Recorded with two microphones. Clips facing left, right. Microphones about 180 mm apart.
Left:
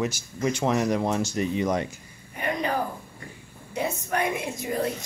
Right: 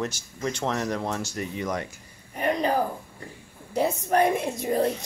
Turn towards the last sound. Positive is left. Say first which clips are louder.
# right 4 dB
turn(degrees=-30)  # may be behind; listen again after turning